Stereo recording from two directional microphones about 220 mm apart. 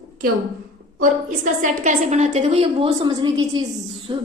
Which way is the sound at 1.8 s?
30° right (ahead or behind).